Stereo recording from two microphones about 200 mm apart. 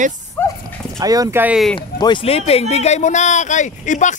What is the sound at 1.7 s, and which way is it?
A man's voice, 20° left (ahead or behind).